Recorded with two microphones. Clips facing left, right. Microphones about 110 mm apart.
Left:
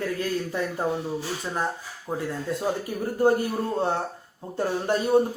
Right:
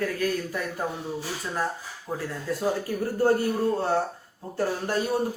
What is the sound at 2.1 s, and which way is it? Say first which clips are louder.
A man's voice: left 2 dB; 20° left (ahead or behind).